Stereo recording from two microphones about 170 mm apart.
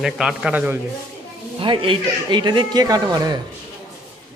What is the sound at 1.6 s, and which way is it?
Speech, 30° right (ahead or behind).